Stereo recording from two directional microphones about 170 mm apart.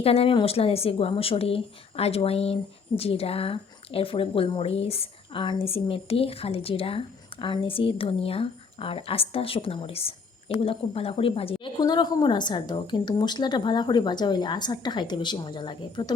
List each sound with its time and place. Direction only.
0.0 s a woman's voice: 35° left (ahead or behind)